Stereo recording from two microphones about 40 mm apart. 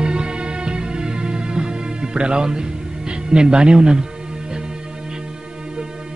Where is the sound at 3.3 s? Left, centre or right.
Right.